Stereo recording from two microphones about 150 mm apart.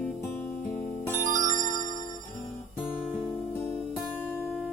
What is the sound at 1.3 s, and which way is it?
Music, 60° right (ahead or behind).